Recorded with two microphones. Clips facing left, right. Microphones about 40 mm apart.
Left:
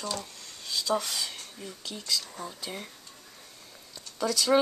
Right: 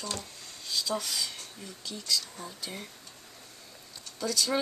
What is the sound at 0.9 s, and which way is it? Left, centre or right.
Speech, left.